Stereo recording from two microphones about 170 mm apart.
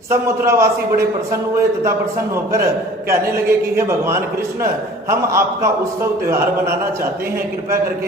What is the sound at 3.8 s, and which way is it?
A man's voice, 15° right (ahead or behind).